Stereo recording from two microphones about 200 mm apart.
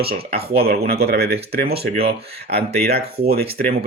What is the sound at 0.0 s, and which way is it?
Speech, 50° right (ahead or behind).